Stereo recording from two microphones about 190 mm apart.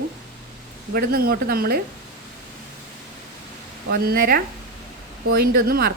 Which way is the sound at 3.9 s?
55° right (ahead or behind).